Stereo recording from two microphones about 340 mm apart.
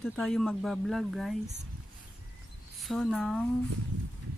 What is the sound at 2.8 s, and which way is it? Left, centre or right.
Speech, centre.